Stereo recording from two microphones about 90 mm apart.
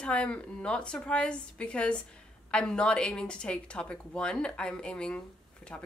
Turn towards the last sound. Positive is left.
turn(degrees=15)  # may be behind; listen again after turning